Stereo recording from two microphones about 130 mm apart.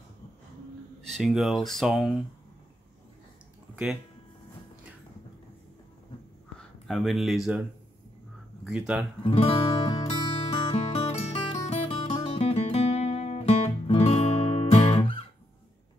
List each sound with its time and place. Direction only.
1.0 s speech: centre (ahead or behind)
3.7 s speech: 5° right (ahead or behind)
6.9 s speech: centre (ahead or behind)
8.6 s speech: 5° right (ahead or behind)
9.2 s music: 50° left (ahead or behind)